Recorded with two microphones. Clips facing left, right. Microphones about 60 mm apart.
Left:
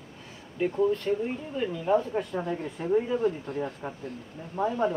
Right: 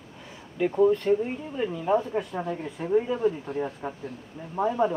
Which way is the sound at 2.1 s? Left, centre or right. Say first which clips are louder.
Even; centre.